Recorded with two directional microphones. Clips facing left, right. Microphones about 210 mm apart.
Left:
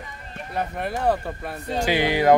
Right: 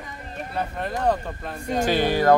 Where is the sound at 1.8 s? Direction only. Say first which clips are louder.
Even; 15° left (ahead or behind).